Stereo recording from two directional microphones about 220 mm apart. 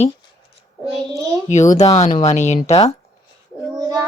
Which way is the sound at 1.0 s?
15° right (ahead or behind).